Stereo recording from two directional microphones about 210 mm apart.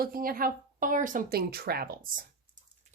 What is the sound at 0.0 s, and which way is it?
Speech, 45° right (ahead or behind).